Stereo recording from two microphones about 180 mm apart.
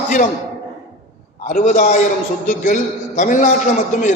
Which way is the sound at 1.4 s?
45° left (ahead or behind).